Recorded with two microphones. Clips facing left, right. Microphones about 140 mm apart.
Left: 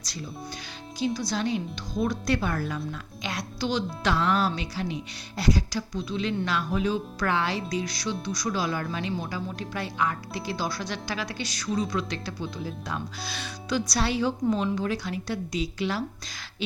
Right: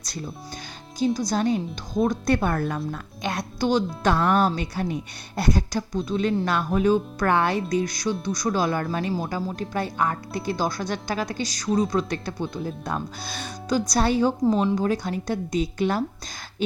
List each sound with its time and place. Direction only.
0.9 s speech: 45° right (ahead or behind)
14.4 s speech: 35° right (ahead or behind); by 16.0 s 50° right (ahead or behind)